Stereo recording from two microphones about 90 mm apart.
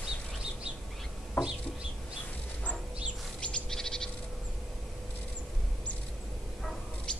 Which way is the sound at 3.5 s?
5° left (ahead or behind).